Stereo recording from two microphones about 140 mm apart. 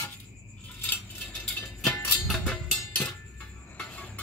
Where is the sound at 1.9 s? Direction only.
20° left (ahead or behind).